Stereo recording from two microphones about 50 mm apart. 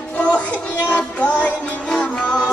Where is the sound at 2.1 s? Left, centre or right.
Centre.